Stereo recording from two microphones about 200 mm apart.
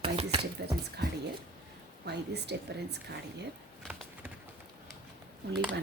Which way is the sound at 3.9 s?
5° right (ahead or behind).